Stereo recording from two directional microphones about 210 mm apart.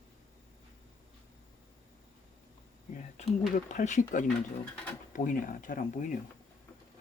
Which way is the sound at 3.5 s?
35° left (ahead or behind).